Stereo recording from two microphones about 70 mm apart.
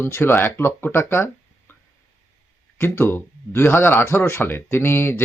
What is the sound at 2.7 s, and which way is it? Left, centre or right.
Speech, left.